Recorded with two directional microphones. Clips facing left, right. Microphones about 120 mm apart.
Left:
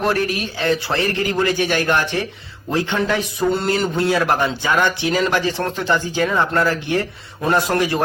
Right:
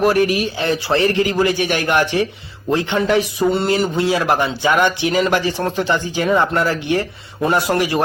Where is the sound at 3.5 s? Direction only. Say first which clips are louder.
Left 1 dB; centre (ahead or behind).